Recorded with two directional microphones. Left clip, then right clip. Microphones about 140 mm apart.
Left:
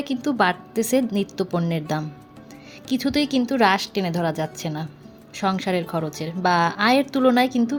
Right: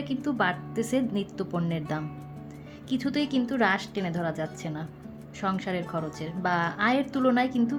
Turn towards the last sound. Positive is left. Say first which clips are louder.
# left 6 dB
turn(degrees=30)  # may be behind; listen again after turning